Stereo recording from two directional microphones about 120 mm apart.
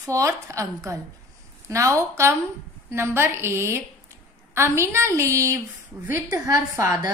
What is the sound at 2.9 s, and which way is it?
A woman's voice, 20° right (ahead or behind).